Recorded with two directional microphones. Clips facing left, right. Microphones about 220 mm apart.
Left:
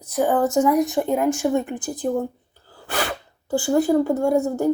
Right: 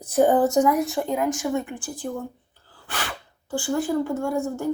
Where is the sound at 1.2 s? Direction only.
30° left (ahead or behind).